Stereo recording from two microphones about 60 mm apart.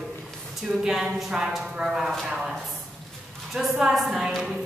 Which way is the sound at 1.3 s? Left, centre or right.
Centre.